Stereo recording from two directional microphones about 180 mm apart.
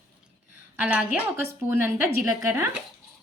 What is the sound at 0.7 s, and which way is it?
Speech, 10° right (ahead or behind).